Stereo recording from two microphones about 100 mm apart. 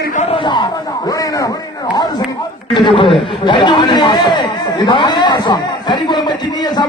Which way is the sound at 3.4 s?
50° left (ahead or behind).